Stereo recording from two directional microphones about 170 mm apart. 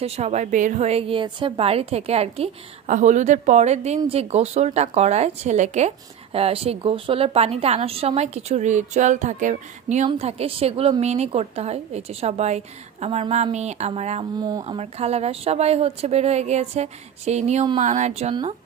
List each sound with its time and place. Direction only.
0.0 s a woman's voice: 40° right (ahead or behind)
14.4 s a woman's voice: 25° right (ahead or behind); by 18.3 s 40° right (ahead or behind)